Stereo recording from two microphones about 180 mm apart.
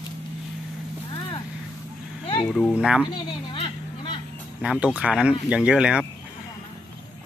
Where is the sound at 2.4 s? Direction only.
5° left (ahead or behind).